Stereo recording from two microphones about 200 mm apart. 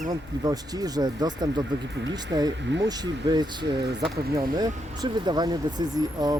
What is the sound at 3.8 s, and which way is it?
Speech, 55° right (ahead or behind).